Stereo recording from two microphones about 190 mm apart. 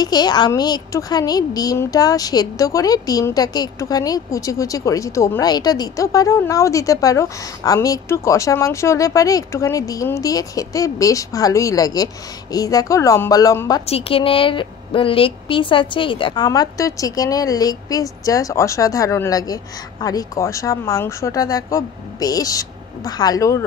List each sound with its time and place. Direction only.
0.0 s a woman's voice: 20° left (ahead or behind)
13.8 s a woman's voice: 30° left (ahead or behind)